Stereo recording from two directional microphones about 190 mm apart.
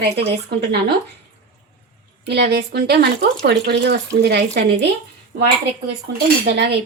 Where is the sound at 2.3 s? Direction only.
60° right (ahead or behind).